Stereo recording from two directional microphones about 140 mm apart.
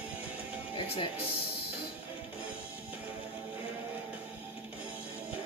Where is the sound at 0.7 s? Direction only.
40° left (ahead or behind).